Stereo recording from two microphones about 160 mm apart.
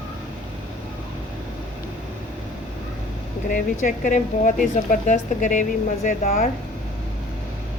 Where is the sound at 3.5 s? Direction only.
50° left (ahead or behind).